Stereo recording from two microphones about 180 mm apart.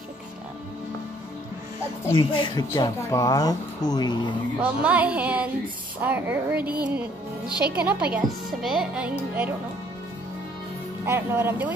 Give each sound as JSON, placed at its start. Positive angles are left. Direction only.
{"t": 2.1, "sound": "speech", "side_deg": 25}
{"t": 4.6, "sound": "speech", "side_deg": -5}
{"t": 11.1, "sound": "speech", "side_deg": -15}